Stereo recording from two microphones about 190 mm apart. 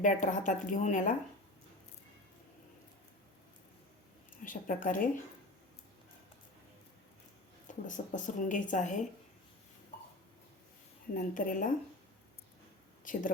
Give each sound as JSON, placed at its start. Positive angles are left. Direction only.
{"t": 0.0, "sound": "a woman's voice", "side_deg": 45}
{"t": 4.4, "sound": "a woman's voice", "side_deg": 45}
{"t": 7.7, "sound": "speech", "side_deg": 40}
{"t": 11.1, "sound": "a woman's voice", "side_deg": 45}
{"t": 13.1, "sound": "speech", "side_deg": 45}